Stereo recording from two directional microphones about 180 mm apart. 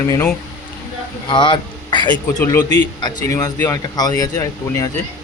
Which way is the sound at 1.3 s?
25° left (ahead or behind).